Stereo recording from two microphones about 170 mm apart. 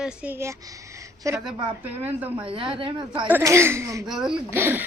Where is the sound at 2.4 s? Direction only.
30° right (ahead or behind).